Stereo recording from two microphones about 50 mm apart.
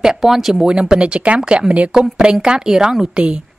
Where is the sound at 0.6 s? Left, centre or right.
Centre.